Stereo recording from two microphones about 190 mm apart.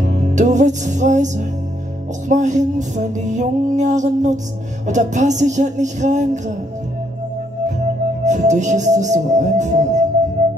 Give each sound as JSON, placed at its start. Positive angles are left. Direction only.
{"t": 0.0, "sound": "music", "side_deg": -40}
{"t": 7.8, "sound": "music", "side_deg": -40}